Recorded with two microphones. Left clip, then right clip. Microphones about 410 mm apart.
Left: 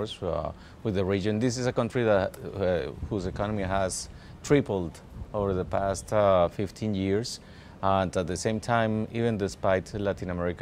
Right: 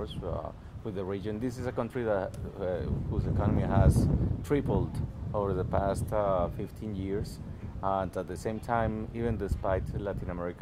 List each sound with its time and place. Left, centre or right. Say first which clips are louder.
0.0 s speech: left 6 dB; left